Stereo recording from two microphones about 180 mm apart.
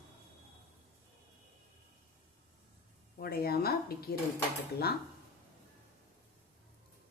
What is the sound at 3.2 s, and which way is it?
Speech, 60° left (ahead or behind).